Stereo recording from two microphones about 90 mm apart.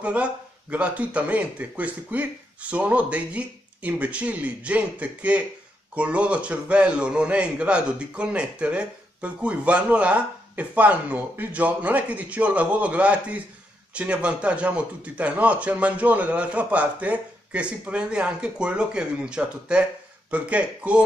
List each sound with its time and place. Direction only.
0.0 s a man's voice: 15° right (ahead or behind)